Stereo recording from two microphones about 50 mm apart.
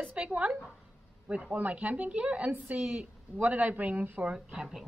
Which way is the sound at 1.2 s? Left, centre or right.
Right.